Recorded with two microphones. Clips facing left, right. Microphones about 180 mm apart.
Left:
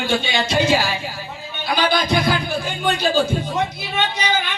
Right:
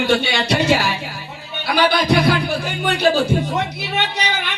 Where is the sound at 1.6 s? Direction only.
70° right (ahead or behind).